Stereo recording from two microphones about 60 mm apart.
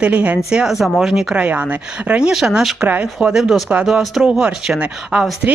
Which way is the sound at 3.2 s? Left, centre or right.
Centre.